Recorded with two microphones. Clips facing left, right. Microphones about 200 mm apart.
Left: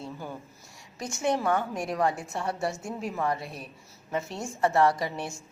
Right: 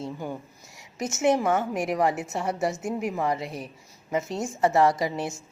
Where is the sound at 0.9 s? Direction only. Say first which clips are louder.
Right 5 dB; 20° right (ahead or behind).